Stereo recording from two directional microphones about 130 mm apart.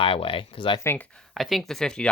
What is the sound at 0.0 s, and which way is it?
Speech, 45° left (ahead or behind).